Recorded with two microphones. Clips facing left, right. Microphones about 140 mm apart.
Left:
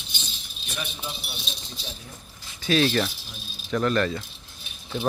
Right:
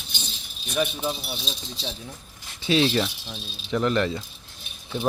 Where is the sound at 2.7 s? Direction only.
20° right (ahead or behind).